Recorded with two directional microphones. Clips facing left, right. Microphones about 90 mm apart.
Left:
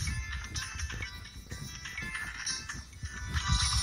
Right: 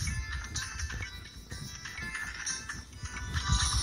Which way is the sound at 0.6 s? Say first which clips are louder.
Right 1 dB; centre (ahead or behind).